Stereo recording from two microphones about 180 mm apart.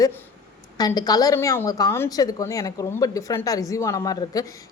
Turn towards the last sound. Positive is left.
turn(degrees=20)  # may be behind; listen again after turning